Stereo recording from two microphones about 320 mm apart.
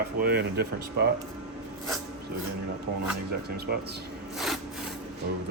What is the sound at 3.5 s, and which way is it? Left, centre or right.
Speech, right.